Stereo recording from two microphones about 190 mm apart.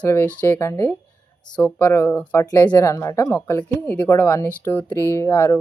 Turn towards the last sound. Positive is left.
turn(degrees=15)  # may be behind; listen again after turning